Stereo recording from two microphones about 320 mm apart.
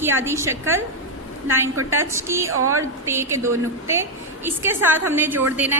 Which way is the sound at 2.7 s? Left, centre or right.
Centre.